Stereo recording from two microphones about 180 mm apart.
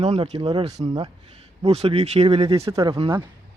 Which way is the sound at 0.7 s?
25° right (ahead or behind).